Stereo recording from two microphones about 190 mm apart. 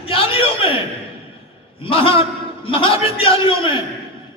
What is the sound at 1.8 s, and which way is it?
A man's voice, 30° left (ahead or behind).